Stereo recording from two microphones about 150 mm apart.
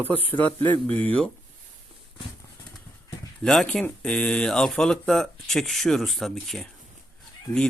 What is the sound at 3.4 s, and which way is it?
Speech, 5° left (ahead or behind).